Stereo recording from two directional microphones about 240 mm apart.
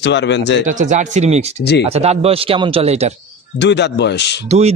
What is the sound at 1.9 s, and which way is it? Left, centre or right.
Speech, right.